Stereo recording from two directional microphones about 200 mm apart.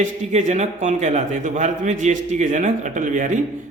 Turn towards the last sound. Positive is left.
turn(degrees=-40)  # may be behind; listen again after turning